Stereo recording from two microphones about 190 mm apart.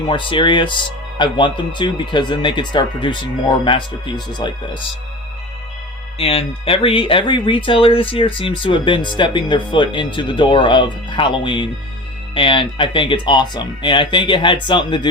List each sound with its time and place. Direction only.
0.1 s speech: 25° left (ahead or behind)
6.1 s speech: 30° left (ahead or behind)